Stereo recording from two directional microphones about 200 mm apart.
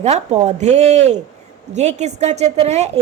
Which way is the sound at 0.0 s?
35° right (ahead or behind).